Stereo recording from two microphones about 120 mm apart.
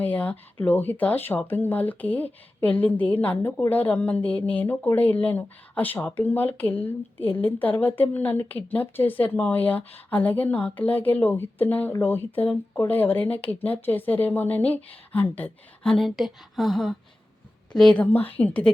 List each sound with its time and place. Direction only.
0.0 s speech: 15° left (ahead or behind)